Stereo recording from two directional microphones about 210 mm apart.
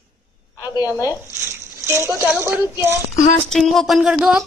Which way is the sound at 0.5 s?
20° left (ahead or behind).